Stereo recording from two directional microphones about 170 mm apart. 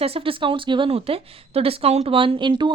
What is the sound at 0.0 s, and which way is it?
Speech, 35° right (ahead or behind).